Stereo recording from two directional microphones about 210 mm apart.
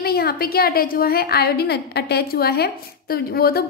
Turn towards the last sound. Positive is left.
turn(degrees=45)  # may be behind; listen again after turning